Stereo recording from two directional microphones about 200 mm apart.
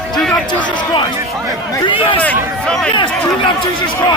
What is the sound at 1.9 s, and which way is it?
Speech, 25° left (ahead or behind).